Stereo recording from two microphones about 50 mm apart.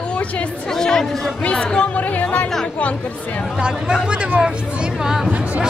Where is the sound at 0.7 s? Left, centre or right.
Centre.